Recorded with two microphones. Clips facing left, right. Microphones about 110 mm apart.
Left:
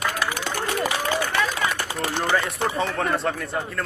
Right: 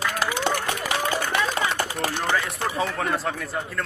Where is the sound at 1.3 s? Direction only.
15° right (ahead or behind).